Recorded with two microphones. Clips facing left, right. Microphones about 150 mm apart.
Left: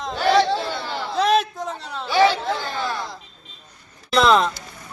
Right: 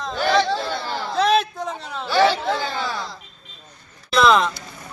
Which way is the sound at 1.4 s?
5° left (ahead or behind).